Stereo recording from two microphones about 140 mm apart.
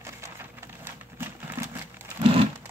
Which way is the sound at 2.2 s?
40° right (ahead or behind).